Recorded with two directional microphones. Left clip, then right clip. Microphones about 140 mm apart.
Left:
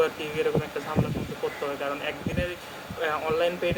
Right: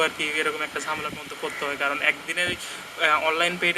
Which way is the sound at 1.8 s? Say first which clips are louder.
Right 7 dB; 20° right (ahead or behind).